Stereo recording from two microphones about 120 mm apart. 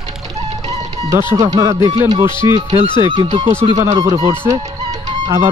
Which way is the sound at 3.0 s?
40° right (ahead or behind).